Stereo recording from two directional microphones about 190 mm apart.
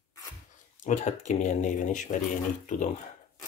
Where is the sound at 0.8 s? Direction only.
40° left (ahead or behind).